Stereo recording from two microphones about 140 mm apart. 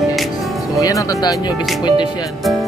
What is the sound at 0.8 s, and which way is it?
Speech, 25° left (ahead or behind).